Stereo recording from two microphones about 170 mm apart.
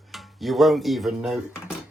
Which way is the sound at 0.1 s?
Centre (ahead or behind).